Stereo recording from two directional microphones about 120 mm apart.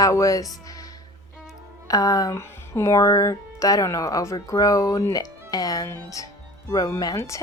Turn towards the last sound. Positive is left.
turn(degrees=25)  # may be behind; listen again after turning